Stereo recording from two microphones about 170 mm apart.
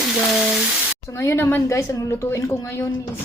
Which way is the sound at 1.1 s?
15° left (ahead or behind).